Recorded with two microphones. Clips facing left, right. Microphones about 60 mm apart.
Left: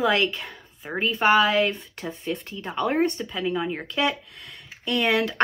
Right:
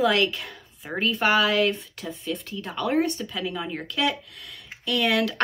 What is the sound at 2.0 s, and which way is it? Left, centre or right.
Speech, left.